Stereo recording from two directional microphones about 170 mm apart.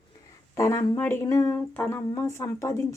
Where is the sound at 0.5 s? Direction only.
20° left (ahead or behind).